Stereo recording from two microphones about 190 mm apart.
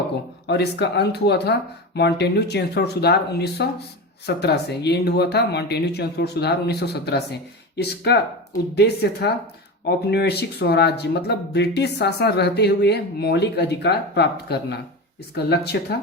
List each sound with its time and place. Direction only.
0.4 s speech: 60° left (ahead or behind)